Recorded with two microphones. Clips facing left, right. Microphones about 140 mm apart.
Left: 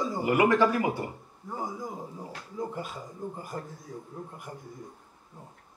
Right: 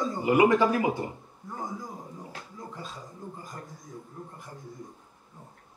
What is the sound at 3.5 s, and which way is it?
Speech, 30° left (ahead or behind).